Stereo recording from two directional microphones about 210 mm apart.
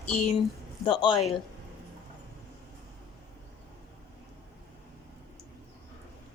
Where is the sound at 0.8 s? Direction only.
20° left (ahead or behind).